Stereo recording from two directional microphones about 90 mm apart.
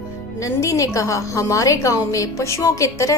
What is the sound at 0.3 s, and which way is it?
A woman's voice, 35° left (ahead or behind).